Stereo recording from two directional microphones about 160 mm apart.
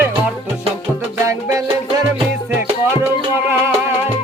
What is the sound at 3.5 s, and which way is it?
Music, 15° right (ahead or behind).